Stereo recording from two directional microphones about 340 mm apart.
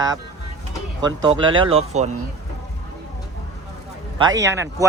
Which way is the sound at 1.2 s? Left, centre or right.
Centre.